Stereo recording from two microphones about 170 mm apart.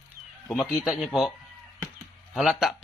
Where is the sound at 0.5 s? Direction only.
Centre (ahead or behind).